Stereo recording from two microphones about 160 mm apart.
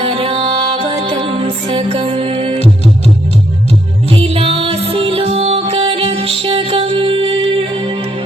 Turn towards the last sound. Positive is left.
turn(degrees=-40)  # may be behind; listen again after turning